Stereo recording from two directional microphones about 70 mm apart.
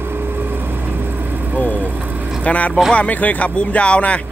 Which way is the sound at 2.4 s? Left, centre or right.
Left.